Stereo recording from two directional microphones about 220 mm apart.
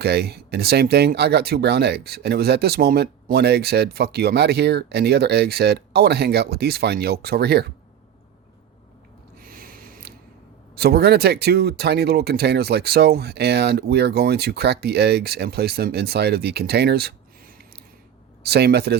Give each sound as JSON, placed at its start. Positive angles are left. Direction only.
{"t": 0.0, "sound": "speech", "side_deg": -45}
{"t": 9.4, "sound": "a sound", "side_deg": -40}
{"t": 10.8, "sound": "speech", "side_deg": -45}